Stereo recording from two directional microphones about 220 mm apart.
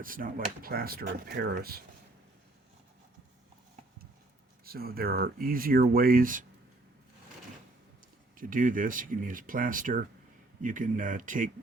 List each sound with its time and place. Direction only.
0.0 s speech: 40° right (ahead or behind)
4.6 s speech: 45° right (ahead or behind)
8.4 s speech: 40° right (ahead or behind)